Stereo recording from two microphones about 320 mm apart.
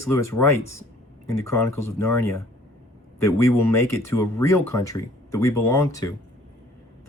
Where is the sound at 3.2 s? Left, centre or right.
Centre.